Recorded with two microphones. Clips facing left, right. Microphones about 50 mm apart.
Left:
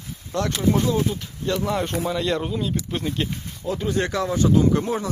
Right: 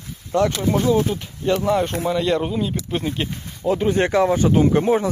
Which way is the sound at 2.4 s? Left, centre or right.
Centre.